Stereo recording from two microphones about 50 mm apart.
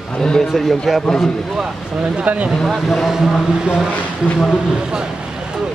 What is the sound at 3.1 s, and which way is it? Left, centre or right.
Speech, centre.